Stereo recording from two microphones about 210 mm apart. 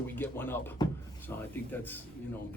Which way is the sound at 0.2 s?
10° left (ahead or behind).